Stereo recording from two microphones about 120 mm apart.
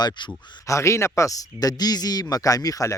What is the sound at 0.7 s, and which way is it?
Speech, 25° left (ahead or behind).